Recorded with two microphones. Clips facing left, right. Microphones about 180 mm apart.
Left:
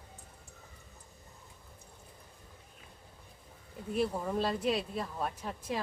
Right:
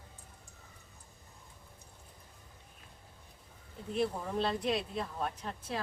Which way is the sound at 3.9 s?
10° left (ahead or behind).